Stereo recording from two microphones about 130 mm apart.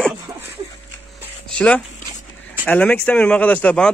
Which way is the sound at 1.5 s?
10° left (ahead or behind).